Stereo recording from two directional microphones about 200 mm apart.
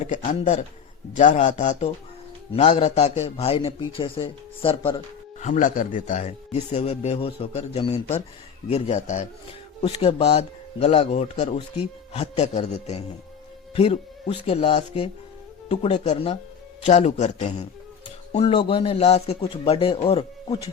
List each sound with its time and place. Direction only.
0.0 s a man's voice: 35° left (ahead or behind)